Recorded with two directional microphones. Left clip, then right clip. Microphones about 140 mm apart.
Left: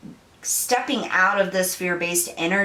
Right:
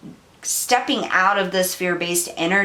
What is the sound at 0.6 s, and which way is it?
Speech, 20° right (ahead or behind).